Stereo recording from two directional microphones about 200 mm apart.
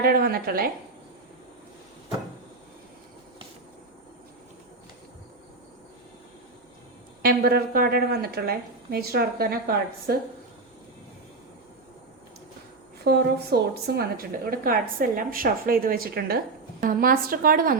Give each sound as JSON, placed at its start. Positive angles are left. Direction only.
{"t": 0.0, "sound": "a woman's voice", "side_deg": -50}
{"t": 7.2, "sound": "a woman's voice", "side_deg": -50}
{"t": 13.1, "sound": "a woman's voice", "side_deg": -50}